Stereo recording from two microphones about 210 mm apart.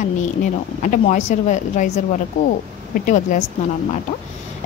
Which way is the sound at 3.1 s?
35° left (ahead or behind).